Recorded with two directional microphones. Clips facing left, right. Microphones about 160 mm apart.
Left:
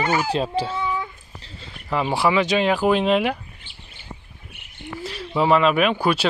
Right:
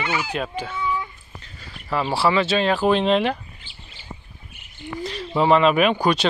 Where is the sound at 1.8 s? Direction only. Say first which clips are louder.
Even; 15° left (ahead or behind).